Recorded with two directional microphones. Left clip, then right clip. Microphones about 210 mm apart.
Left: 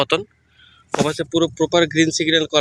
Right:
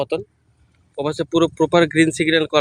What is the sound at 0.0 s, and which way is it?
Speech, centre (ahead or behind).